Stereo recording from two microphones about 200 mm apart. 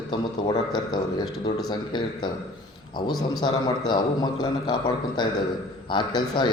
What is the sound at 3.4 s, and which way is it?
A man's voice, 20° left (ahead or behind).